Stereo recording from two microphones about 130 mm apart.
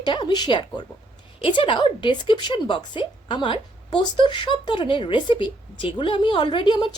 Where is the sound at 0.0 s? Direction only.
35° left (ahead or behind).